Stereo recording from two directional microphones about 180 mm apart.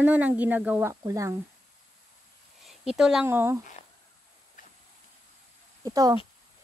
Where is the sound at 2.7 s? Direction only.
5° right (ahead or behind).